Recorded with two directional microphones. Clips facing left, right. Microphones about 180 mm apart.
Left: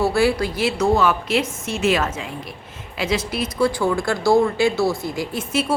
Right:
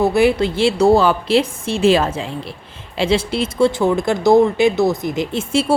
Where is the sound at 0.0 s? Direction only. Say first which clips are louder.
Right 4 dB; 20° right (ahead or behind).